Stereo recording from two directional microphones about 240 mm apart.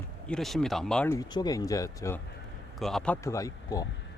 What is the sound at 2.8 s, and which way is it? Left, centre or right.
Speech, centre.